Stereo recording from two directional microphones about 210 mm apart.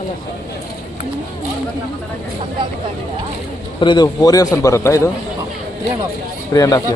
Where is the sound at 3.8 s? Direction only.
20° left (ahead or behind).